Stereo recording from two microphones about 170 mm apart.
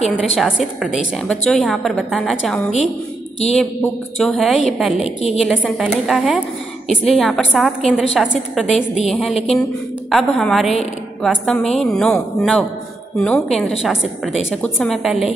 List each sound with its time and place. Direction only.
0.1 s a woman's voice: 5° right (ahead or behind)
5.0 s a woman's voice: 40° left (ahead or behind)
5.4 s a woman's voice: centre (ahead or behind)